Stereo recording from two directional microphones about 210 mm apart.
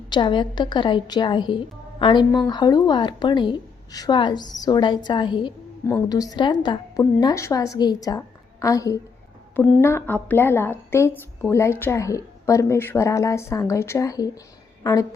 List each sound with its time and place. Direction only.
0.1 s a woman's voice: 20° left (ahead or behind)